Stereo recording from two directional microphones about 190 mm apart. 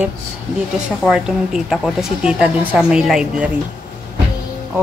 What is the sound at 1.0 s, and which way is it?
A woman's voice, 5° right (ahead or behind).